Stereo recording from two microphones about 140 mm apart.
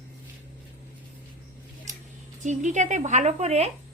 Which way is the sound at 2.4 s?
60° right (ahead or behind).